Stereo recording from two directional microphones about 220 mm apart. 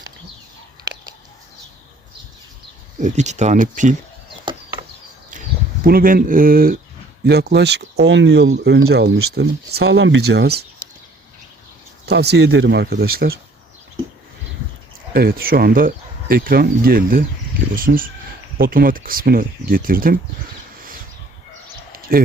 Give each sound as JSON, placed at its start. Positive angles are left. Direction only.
{"t": 3.0, "sound": "speech", "side_deg": -30}
{"t": 5.8, "sound": "speech", "side_deg": -40}
{"t": 12.0, "sound": "speech", "side_deg": -50}
{"t": 15.1, "sound": "speech", "side_deg": -45}
{"t": 21.9, "sound": "a sound", "side_deg": -40}